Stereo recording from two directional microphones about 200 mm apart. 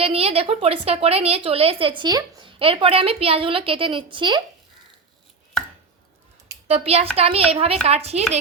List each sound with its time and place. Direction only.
0.0 s a woman's voice: 30° right (ahead or behind)
6.7 s a woman's voice: 30° right (ahead or behind)